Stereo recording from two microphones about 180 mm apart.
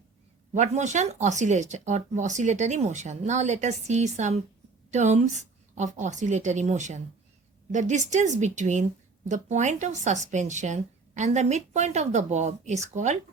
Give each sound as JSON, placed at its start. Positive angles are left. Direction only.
{"t": 0.5, "sound": "speech", "side_deg": -40}